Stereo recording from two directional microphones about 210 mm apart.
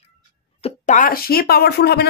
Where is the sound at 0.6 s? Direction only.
35° left (ahead or behind).